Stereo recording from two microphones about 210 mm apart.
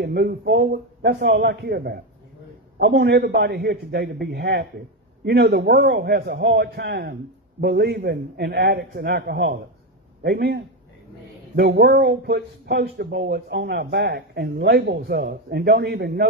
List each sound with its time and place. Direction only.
0.0 s a man's voice: 50° right (ahead or behind)